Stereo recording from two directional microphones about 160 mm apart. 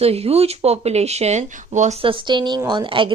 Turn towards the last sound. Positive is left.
turn(degrees=-30)  # may be behind; listen again after turning